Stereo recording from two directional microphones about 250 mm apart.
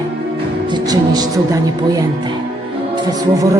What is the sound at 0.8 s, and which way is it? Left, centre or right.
Speech, centre.